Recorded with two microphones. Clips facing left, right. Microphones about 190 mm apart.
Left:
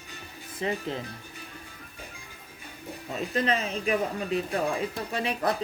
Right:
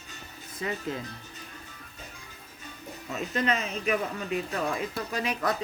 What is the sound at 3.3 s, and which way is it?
Speech, 35° left (ahead or behind).